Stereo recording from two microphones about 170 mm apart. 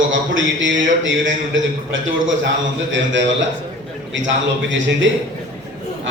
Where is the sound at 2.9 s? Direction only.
90° right.